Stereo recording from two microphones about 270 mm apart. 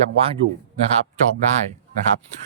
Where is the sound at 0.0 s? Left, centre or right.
Right.